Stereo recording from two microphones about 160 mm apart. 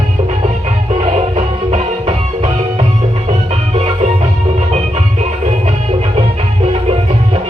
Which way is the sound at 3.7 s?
40° right (ahead or behind).